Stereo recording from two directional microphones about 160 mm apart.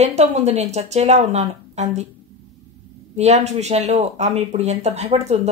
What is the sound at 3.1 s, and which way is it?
Speech, 45° right (ahead or behind).